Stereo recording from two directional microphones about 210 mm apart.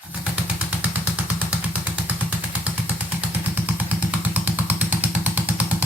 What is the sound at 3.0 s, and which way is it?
Motorcycle, 10° right (ahead or behind).